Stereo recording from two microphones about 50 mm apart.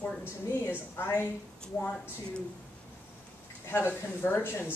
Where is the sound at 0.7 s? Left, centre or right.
Left.